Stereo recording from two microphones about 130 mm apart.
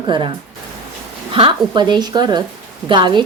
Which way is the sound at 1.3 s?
40° right (ahead or behind).